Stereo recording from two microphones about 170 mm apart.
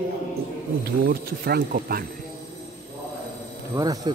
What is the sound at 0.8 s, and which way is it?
Speech, 65° right (ahead or behind).